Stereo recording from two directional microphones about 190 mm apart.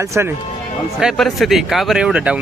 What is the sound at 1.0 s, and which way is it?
Speech, centre (ahead or behind).